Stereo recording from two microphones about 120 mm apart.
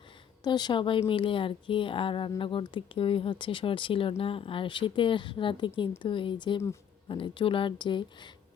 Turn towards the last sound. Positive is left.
turn(degrees=40)  # may be behind; listen again after turning